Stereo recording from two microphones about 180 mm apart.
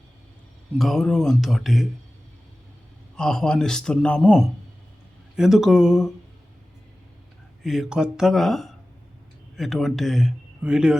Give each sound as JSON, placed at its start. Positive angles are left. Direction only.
{"t": 0.8, "sound": "a man's voice", "side_deg": 0}
{"t": 3.2, "sound": "a man's voice", "side_deg": 5}
{"t": 7.6, "sound": "a man's voice", "side_deg": 0}